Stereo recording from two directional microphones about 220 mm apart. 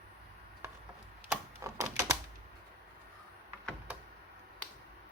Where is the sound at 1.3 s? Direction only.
15° right (ahead or behind).